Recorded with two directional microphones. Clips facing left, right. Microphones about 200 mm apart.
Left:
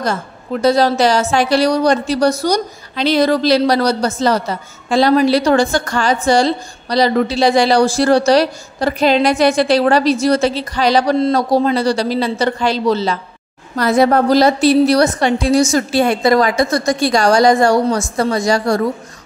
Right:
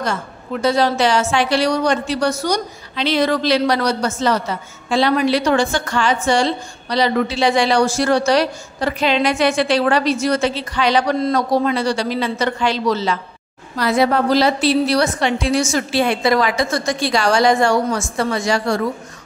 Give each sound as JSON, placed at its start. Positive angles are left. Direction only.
{"t": 0.0, "sound": "a woman's voice", "side_deg": 40}
{"t": 13.7, "sound": "a woman's voice", "side_deg": 45}